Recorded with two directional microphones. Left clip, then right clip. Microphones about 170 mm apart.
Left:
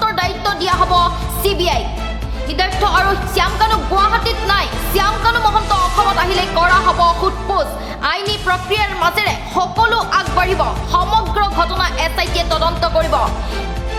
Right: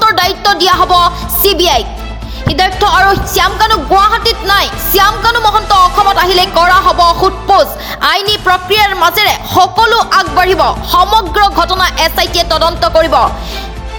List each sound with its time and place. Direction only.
0.0 s a woman's voice: 45° right (ahead or behind)